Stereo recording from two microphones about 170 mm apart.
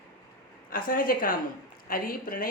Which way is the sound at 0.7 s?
55° left (ahead or behind).